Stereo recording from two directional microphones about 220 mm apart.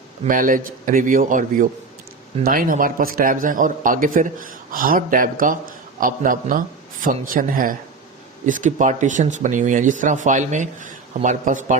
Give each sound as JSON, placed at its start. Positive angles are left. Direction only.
{"t": 0.3, "sound": "a man's voice", "side_deg": -40}